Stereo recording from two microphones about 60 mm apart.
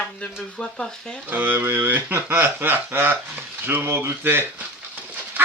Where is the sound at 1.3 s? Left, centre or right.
Right.